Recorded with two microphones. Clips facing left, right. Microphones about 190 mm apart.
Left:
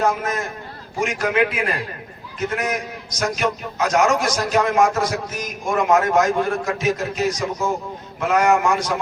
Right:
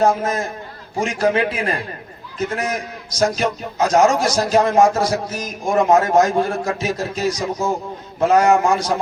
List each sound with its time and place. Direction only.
0.0 s a man's voice: 30° right (ahead or behind)
3.2 s a man's voice: 30° right (ahead or behind)